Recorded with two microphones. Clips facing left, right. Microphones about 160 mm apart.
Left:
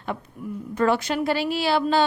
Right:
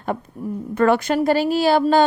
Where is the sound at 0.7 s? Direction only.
60° right (ahead or behind).